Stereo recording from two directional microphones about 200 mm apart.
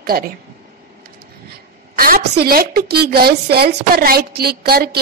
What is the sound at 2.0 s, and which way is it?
A woman's voice, 45° right (ahead or behind).